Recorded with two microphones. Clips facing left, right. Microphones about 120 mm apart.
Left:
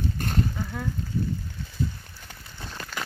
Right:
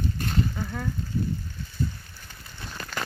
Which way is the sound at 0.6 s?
Centre (ahead or behind).